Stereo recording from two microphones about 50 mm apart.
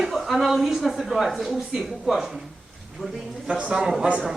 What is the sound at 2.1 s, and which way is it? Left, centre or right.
Speech, centre.